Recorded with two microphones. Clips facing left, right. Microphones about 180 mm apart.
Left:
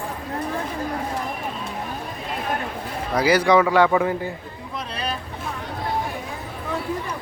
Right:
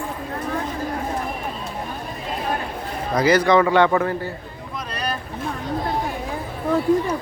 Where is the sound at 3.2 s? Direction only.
10° left (ahead or behind).